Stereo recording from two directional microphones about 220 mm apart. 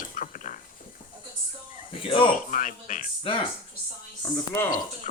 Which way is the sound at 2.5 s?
35° left (ahead or behind).